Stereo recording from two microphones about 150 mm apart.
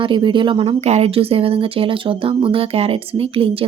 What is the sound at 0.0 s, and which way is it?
Speech, 35° right (ahead or behind).